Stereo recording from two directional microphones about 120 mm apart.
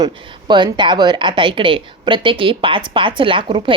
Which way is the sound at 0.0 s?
40° right (ahead or behind).